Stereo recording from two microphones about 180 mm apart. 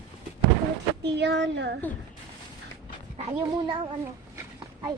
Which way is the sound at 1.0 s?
70° right (ahead or behind).